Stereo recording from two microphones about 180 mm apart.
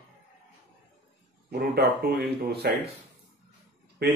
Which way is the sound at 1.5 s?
60° right (ahead or behind).